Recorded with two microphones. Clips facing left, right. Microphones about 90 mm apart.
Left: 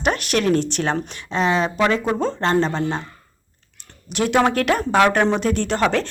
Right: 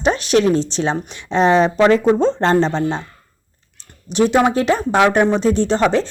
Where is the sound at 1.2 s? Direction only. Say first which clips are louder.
Right 7 dB; 35° right (ahead or behind).